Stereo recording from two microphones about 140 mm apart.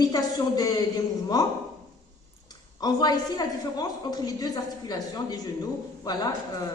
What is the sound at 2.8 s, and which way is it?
A man's voice, 30° left (ahead or behind).